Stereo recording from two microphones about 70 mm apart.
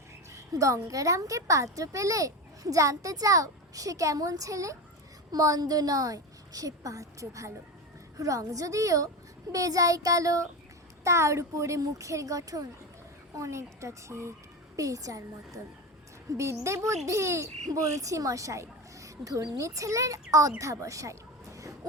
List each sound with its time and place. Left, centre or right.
0.5 s speech: right
5.3 s a woman's voice: right
16.4 s a woman's voice: right